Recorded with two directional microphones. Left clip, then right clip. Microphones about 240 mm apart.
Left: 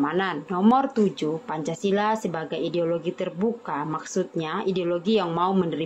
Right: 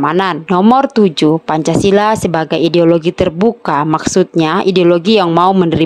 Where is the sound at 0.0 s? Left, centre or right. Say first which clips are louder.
Right 12 dB; right.